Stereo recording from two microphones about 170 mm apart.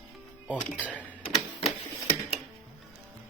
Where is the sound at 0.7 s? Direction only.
5° right (ahead or behind).